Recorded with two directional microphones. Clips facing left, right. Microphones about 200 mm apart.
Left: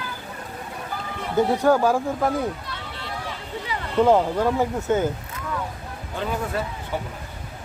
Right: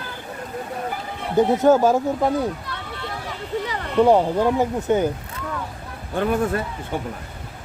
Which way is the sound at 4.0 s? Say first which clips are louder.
Right 2 dB; 15° right (ahead or behind).